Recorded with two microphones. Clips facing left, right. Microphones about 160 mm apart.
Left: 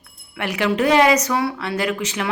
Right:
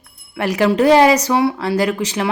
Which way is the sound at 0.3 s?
35° right (ahead or behind).